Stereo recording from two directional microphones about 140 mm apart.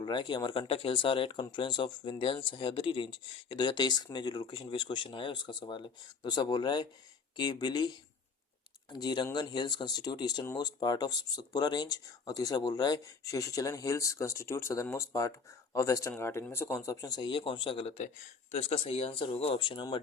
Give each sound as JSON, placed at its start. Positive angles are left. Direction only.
{"t": 0.0, "sound": "speech", "side_deg": 35}